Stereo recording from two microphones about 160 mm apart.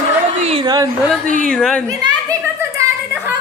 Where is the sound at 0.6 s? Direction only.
25° right (ahead or behind).